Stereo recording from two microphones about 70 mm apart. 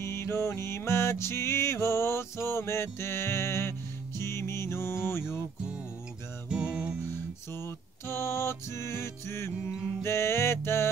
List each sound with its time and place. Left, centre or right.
0.0 s music: left
6.5 s music: centre
7.1 s music: left